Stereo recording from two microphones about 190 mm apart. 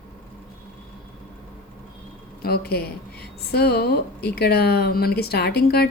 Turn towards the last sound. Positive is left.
turn(degrees=55)  # may be behind; listen again after turning